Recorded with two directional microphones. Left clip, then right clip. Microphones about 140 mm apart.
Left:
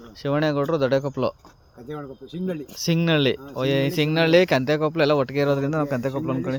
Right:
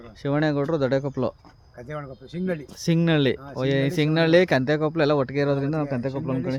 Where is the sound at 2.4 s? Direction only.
25° right (ahead or behind).